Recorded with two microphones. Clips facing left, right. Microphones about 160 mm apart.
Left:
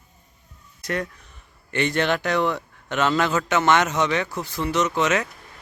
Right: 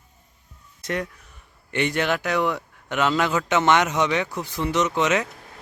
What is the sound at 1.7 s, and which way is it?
A man's voice, 15° right (ahead or behind).